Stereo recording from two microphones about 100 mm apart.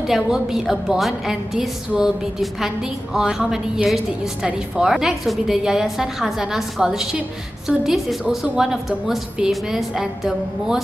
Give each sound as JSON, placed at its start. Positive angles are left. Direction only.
{"t": 0.0, "sound": "a woman's voice", "side_deg": -5}